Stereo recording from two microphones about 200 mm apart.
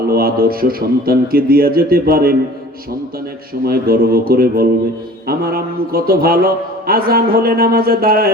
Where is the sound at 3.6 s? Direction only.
50° right (ahead or behind).